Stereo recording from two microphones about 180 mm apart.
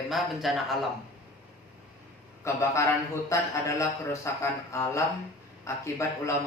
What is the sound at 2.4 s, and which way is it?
A man's voice, 15° left (ahead or behind).